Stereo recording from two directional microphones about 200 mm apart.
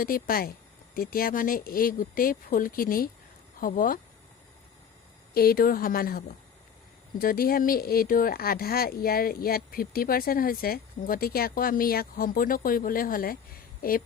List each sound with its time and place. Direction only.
0.0 s speech: 45° left (ahead or behind)
5.3 s speech: 50° left (ahead or behind)